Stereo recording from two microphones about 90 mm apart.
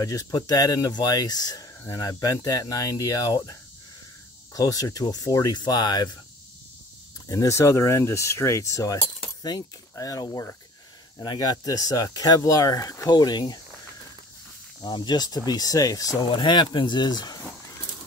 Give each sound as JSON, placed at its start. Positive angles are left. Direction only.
{"t": 0.0, "sound": "speech", "side_deg": 40}
{"t": 4.6, "sound": "speech", "side_deg": 40}
{"t": 7.2, "sound": "speech", "side_deg": 35}
{"t": 13.1, "sound": "speech", "side_deg": 50}
{"t": 14.8, "sound": "speech", "side_deg": 60}
{"t": 16.3, "sound": "speech", "side_deg": 55}